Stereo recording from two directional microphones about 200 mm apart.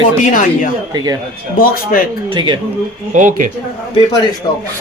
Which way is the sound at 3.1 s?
40° right (ahead or behind).